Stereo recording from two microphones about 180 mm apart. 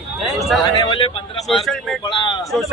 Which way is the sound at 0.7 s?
25° left (ahead or behind).